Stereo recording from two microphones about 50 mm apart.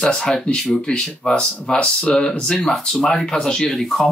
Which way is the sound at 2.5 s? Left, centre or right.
Centre.